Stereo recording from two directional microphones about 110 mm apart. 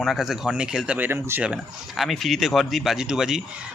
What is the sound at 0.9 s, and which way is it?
Speech, 20° right (ahead or behind).